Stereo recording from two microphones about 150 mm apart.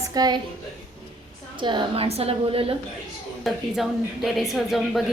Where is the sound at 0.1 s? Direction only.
25° right (ahead or behind).